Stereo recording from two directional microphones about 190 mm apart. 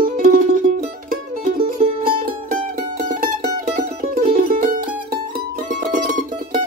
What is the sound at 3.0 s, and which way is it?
Mandolin, 45° right (ahead or behind).